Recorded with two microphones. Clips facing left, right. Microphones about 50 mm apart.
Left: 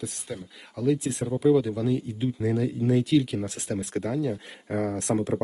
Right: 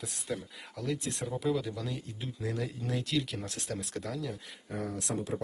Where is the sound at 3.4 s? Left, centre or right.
Left.